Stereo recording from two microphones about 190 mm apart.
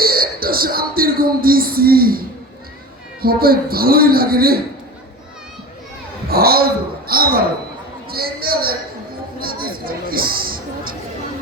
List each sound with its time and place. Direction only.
0.0 s a man's voice: 50° right (ahead or behind)
6.2 s a man's voice: 55° right (ahead or behind)
9.4 s a sound: 50° right (ahead or behind)